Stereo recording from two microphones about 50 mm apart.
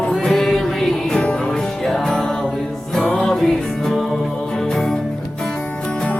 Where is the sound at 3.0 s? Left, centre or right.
Centre.